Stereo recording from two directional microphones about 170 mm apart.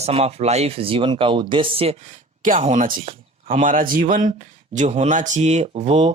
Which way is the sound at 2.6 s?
35° right (ahead or behind).